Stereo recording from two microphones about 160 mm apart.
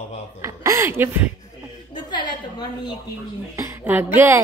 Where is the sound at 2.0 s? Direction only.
25° left (ahead or behind).